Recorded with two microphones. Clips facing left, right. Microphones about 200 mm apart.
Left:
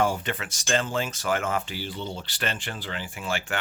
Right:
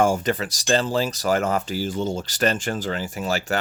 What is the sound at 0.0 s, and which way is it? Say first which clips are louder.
Speech: right 6 dB; 45° right (ahead or behind).